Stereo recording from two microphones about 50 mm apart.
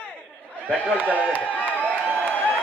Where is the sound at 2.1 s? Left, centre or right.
Left.